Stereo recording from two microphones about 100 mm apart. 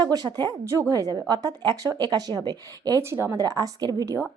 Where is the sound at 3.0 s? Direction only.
25° right (ahead or behind).